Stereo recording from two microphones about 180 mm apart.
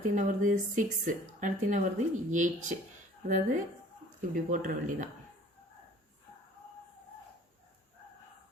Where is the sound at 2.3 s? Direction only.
45° right (ahead or behind).